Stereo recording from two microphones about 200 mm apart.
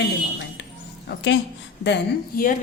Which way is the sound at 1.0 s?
60° left (ahead or behind).